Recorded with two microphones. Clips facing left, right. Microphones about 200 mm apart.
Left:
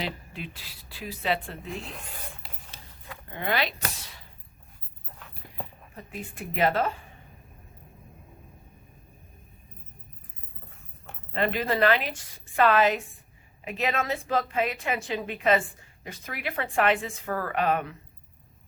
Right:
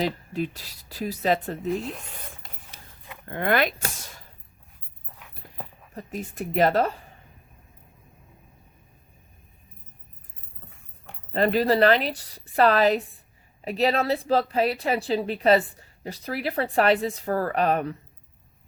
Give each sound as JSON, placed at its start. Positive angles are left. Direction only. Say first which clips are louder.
{"t": 0.0, "sound": "a woman's voice", "louder": "right 8 dB", "side_deg": -40}
{"t": 3.2, "sound": "speech", "louder": "right 6 dB", "side_deg": -55}
{"t": 5.9, "sound": "a woman's voice", "louder": "right 5 dB", "side_deg": -40}
{"t": 11.3, "sound": "a woman's voice", "louder": "right 5 dB", "side_deg": -40}